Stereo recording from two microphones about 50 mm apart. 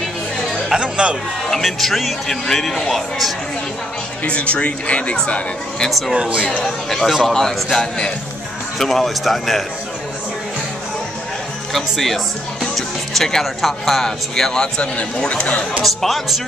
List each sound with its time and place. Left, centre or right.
0.7 s speech: centre
1.5 s speech: centre
4.2 s speech: left
5.9 s speech: centre
6.1 s speech: right
6.6 s speech: centre
11.7 s speech: centre; by 15.6 s left
15.8 s speech: centre